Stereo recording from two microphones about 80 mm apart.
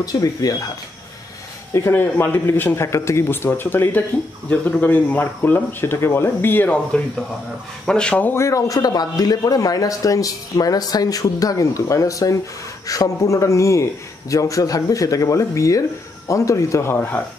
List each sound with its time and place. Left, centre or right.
0.0 s a man's voice: left
1.7 s a man's voice: left; by 8.3 s centre
8.3 s a man's voice: left